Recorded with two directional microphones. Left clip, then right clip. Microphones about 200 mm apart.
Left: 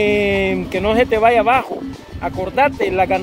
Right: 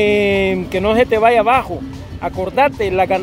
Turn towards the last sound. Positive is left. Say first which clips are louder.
# right 1 dB
turn(degrees=-15)  # may be behind; listen again after turning